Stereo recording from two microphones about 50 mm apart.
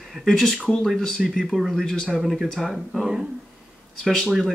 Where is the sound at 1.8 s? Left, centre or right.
Centre.